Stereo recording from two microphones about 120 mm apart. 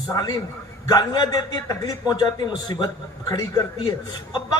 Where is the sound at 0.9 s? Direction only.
35° left (ahead or behind).